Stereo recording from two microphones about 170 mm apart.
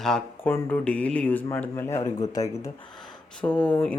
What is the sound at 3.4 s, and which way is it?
Speech, 5° left (ahead or behind).